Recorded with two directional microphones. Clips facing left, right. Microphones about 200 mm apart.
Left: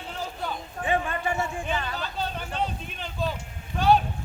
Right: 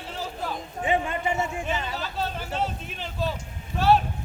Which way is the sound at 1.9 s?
Centre (ahead or behind).